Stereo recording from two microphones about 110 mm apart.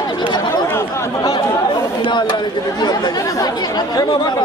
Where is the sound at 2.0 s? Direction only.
45° left (ahead or behind).